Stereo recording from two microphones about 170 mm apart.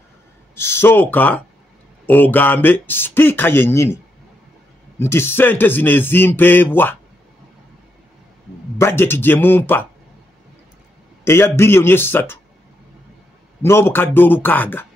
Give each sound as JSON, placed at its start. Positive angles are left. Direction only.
{"t": 0.6, "sound": "speech", "side_deg": 15}
{"t": 8.7, "sound": "speech", "side_deg": 15}
{"t": 11.2, "sound": "speech", "side_deg": 15}
{"t": 13.6, "sound": "speech", "side_deg": 15}